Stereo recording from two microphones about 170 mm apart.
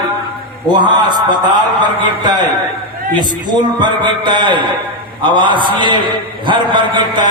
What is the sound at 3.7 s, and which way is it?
A man's voice, 25° right (ahead or behind).